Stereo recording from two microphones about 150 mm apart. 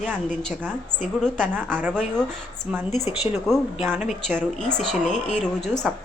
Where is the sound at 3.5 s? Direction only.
5° left (ahead or behind).